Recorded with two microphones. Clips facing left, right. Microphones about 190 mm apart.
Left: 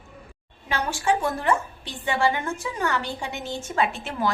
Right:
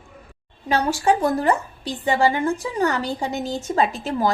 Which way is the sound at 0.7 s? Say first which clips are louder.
Right 5 dB; 40° right (ahead or behind).